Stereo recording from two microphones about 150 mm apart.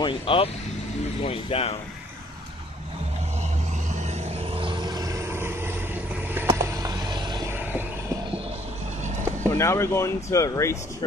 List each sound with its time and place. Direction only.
0.0 s speech: 35° left (ahead or behind)
4.6 s vehicle: 30° right (ahead or behind)
9.4 s speech: 15° left (ahead or behind)